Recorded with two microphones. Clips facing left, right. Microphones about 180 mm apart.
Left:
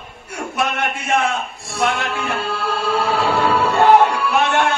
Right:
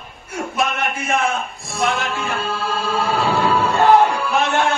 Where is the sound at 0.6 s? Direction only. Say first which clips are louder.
Left 1 dB; 70° left (ahead or behind).